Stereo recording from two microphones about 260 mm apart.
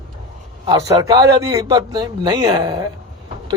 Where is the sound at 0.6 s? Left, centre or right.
Centre.